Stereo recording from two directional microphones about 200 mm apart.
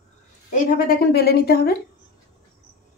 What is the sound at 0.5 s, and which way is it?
A woman's voice, 45° left (ahead or behind).